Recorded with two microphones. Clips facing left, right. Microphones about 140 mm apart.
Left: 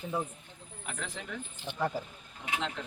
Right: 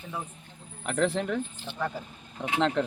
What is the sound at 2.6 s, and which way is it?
Speech, 70° right (ahead or behind).